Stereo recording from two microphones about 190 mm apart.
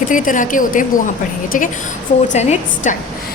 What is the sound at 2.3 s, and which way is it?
Speech, 35° left (ahead or behind).